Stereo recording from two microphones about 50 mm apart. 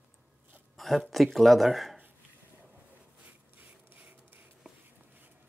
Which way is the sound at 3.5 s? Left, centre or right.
Right.